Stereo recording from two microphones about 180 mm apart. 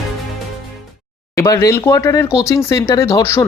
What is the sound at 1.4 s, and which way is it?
Speech, 15° left (ahead or behind).